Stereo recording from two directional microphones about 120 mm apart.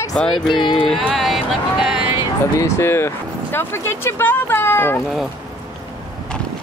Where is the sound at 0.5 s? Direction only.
40° left (ahead or behind).